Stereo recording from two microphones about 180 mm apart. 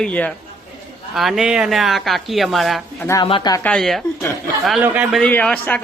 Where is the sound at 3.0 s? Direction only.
20° left (ahead or behind).